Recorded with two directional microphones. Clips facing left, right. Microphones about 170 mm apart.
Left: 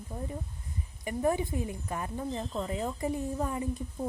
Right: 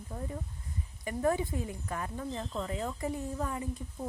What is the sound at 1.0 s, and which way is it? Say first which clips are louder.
Speech: left 1 dB; 15° left (ahead or behind).